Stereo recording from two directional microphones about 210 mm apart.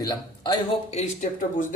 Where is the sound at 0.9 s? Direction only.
35° left (ahead or behind).